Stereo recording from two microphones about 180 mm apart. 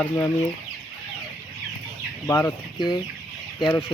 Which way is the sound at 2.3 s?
15° left (ahead or behind).